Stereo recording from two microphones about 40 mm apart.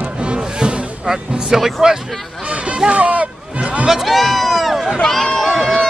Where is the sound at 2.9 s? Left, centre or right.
Right.